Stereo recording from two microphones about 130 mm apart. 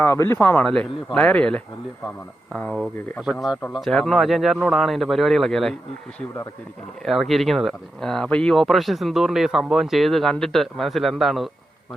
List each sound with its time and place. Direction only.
0.0 s speech: 20° left (ahead or behind)
2.8 s speech: 5° right (ahead or behind)
7.0 s speech: centre (ahead or behind)